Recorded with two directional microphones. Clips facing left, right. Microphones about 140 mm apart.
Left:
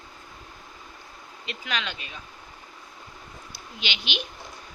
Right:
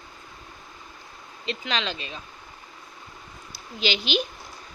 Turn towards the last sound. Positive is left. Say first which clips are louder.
# right 8 dB
turn(degrees=-40)  # may be behind; listen again after turning